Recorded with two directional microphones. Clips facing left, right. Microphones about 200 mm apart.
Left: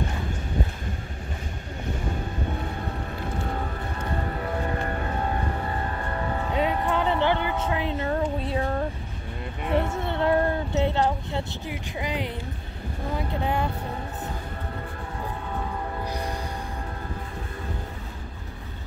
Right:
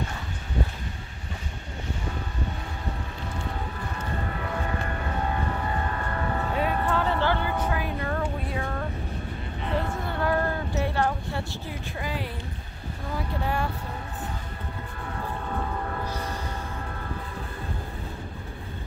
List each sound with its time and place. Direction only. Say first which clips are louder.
6.1 s vehicle: left 2 dB; 20° left (ahead or behind)
8.2 s music: left 4 dB; 30° left (ahead or behind)
9.9 s vehicle: left 3 dB; 25° left (ahead or behind)
12.0 s a sound: left 3 dB; 20° left (ahead or behind)
16.1 s music: left 2 dB; 15° left (ahead or behind)